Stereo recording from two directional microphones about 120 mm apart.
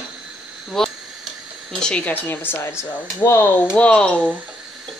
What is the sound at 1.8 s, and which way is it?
Speech, 10° left (ahead or behind).